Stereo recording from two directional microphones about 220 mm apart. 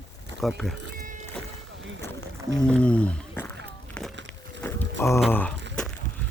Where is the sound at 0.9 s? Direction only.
35° right (ahead or behind).